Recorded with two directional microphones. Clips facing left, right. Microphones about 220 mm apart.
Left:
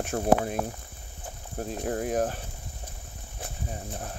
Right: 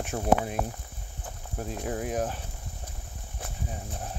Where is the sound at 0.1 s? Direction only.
50° left (ahead or behind).